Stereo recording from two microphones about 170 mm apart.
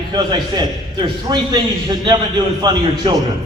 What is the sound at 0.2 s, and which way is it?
A man's voice, 25° right (ahead or behind).